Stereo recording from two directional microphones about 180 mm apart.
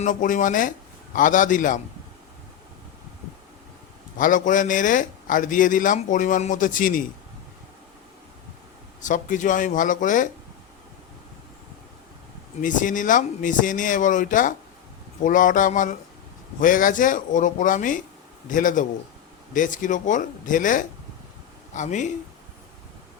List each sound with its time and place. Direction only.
0.0 s speech: 45° left (ahead or behind)
4.2 s speech: 45° left (ahead or behind)
9.0 s speech: 45° left (ahead or behind)
12.6 s speech: 45° left (ahead or behind)